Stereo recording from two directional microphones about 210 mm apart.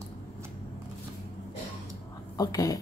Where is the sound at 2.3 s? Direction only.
15° left (ahead or behind).